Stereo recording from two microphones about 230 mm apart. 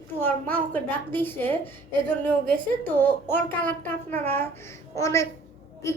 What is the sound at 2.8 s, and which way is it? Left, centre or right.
A woman's voice, centre.